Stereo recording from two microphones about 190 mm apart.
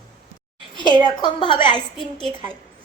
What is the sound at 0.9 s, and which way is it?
Speech, 25° right (ahead or behind).